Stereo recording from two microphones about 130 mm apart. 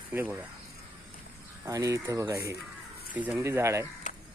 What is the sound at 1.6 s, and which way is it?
Speech, 25° right (ahead or behind).